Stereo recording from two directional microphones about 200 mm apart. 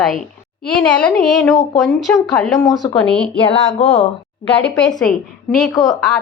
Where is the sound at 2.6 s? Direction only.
20° left (ahead or behind).